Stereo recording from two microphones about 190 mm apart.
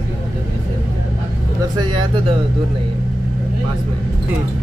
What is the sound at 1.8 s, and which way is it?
Speech, 25° right (ahead or behind).